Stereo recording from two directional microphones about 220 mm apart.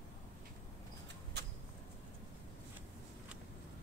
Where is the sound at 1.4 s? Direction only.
50° right (ahead or behind).